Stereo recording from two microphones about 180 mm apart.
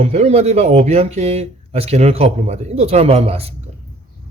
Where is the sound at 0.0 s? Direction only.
35° right (ahead or behind).